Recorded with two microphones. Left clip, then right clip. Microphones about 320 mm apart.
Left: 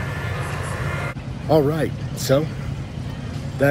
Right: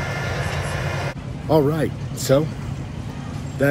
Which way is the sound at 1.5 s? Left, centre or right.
Centre.